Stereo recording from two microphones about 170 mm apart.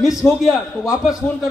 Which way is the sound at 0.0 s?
Centre (ahead or behind).